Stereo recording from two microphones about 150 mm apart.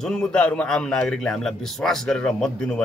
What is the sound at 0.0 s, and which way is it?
A man's voice, 5° left (ahead or behind).